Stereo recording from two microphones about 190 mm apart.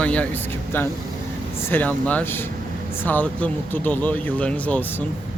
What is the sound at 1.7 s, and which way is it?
Speech, 10° left (ahead or behind).